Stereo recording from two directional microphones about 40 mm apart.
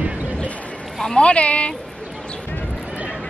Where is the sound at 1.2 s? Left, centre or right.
Left.